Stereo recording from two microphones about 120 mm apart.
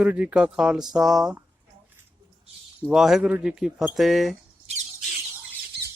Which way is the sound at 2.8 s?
5° right (ahead or behind).